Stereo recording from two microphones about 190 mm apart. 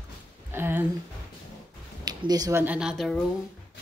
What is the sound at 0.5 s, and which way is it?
Speech, 10° right (ahead or behind).